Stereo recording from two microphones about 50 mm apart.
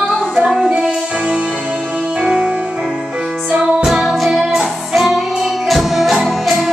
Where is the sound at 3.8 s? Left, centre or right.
Centre.